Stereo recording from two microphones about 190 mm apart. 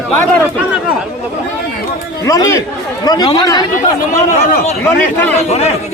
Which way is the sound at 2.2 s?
15° left (ahead or behind).